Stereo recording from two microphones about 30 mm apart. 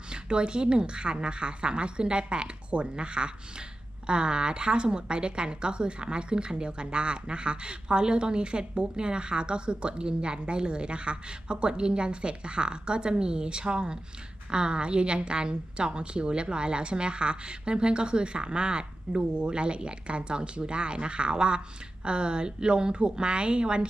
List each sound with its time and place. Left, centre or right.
0.1 s a woman's voice: right